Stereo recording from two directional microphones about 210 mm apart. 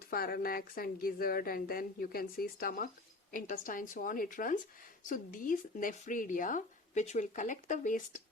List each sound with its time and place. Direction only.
0.1 s a woman's voice: 45° left (ahead or behind)